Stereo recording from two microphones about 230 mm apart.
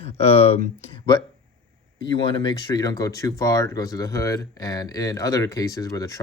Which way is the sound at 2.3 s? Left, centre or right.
Centre.